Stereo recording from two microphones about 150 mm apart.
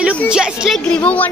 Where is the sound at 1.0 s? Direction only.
10° left (ahead or behind).